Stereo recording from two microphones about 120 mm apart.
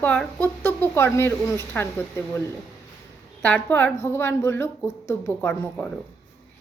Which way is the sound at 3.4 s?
15° left (ahead or behind).